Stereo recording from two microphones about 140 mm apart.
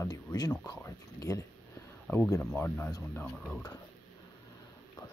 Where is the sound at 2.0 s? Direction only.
10° left (ahead or behind).